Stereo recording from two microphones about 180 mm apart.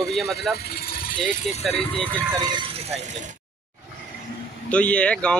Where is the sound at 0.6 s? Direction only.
60° left (ahead or behind).